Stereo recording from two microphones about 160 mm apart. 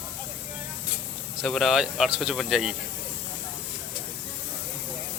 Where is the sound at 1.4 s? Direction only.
Centre (ahead or behind).